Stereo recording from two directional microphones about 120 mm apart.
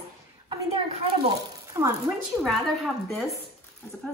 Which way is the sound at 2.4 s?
Centre (ahead or behind).